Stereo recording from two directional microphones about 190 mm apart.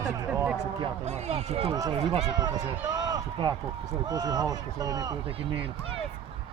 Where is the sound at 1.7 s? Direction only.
20° right (ahead or behind).